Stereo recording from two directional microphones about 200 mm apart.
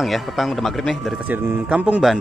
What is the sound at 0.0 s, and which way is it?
A man's voice, centre (ahead or behind).